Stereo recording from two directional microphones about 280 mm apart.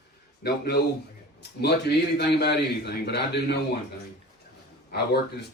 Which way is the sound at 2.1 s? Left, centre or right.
Left.